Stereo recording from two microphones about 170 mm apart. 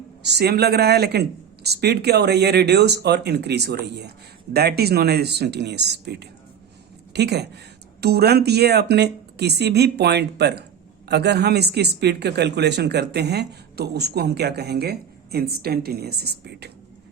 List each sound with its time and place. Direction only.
0.2 s speech: 80° right
4.5 s speech: 70° right (ahead or behind)